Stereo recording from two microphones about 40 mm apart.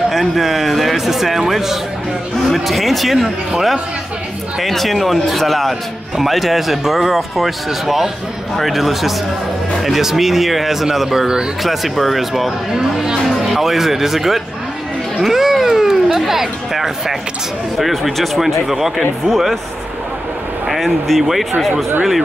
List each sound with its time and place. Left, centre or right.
0.1 s speech: centre
11.6 s speech: centre
12.7 s speech: centre
13.3 s speech: centre
20.6 s speech: centre